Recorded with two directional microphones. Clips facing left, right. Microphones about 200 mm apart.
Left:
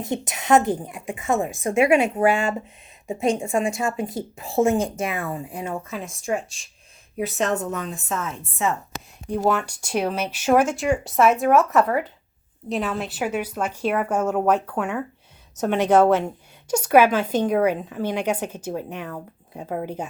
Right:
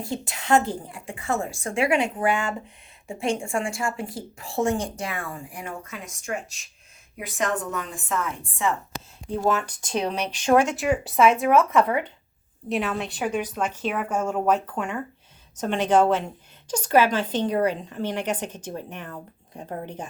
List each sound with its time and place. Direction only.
0.0 s a woman's voice: 20° left (ahead or behind)
9.4 s a woman's voice: 10° left (ahead or behind)